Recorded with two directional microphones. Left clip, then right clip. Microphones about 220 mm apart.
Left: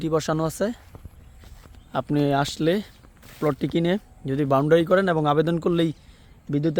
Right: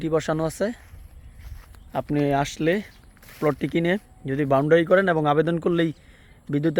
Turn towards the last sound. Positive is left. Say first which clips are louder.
# right 1 dB
turn(degrees=5)  # may be behind; listen again after turning